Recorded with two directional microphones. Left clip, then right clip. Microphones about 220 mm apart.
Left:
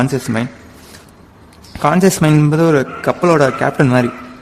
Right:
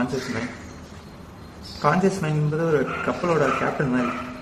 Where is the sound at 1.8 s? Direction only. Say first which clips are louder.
Left 8 dB; 55° left (ahead or behind).